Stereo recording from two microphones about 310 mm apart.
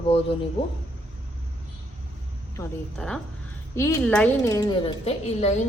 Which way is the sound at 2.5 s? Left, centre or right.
Centre.